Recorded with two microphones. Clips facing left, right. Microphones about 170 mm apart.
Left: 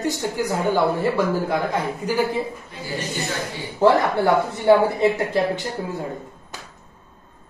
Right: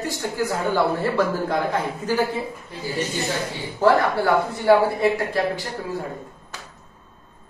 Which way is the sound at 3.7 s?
20° left (ahead or behind).